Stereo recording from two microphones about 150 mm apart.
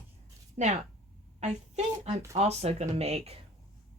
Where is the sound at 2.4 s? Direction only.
45° right (ahead or behind).